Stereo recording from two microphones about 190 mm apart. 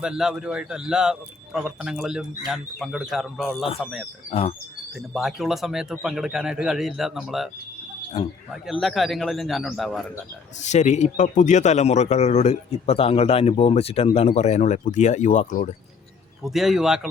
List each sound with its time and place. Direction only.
0.0 s speech: 5° right (ahead or behind)
4.3 s speech: 30° left (ahead or behind)
5.1 s speech: centre (ahead or behind)
8.6 s speech: centre (ahead or behind)
10.6 s a man's voice: 40° left (ahead or behind)
16.4 s speech: centre (ahead or behind)